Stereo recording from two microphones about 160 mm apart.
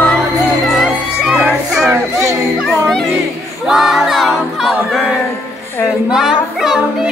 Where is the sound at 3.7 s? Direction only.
Centre (ahead or behind).